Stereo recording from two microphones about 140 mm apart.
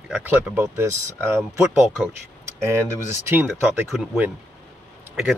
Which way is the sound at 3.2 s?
15° right (ahead or behind).